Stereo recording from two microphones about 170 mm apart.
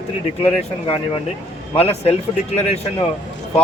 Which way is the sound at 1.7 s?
35° left (ahead or behind).